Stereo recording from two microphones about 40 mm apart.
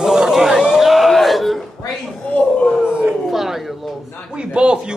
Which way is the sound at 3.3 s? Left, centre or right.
Centre.